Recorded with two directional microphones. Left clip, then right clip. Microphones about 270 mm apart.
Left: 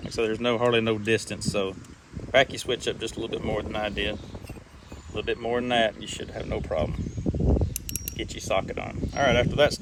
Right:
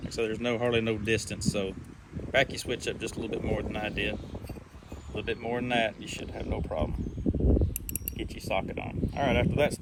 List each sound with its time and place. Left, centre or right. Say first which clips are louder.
0.2 s speech: left 5 dB; left
5.2 s speech: left 5 dB; left
7.4 s mechanisms: left 3 dB; centre
8.4 s speech: left 4 dB; left